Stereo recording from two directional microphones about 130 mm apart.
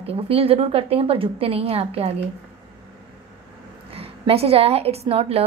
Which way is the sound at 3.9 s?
50° right (ahead or behind).